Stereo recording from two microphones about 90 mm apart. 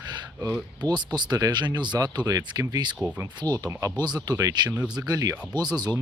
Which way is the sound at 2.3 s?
40° right (ahead or behind).